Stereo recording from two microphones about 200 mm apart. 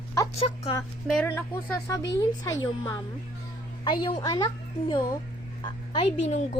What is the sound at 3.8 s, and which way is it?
A woman's voice, 25° left (ahead or behind).